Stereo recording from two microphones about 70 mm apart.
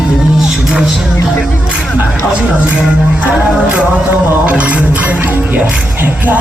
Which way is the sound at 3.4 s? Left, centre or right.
Centre.